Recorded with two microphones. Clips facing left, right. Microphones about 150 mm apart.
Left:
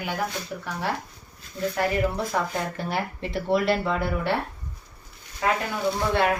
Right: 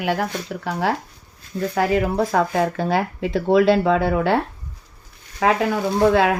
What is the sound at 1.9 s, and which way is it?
Speech, 90° right.